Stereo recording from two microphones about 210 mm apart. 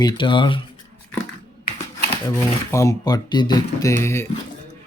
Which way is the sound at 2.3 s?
15° left (ahead or behind).